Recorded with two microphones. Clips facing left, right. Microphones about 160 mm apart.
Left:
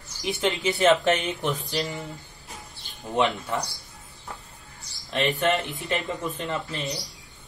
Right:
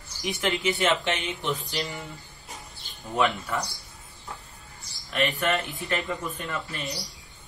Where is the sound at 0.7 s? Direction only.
40° left (ahead or behind).